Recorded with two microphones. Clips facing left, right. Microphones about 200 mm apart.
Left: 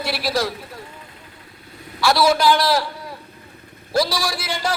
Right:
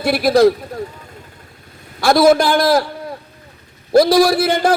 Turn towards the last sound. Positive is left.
turn(degrees=-55)  # may be behind; listen again after turning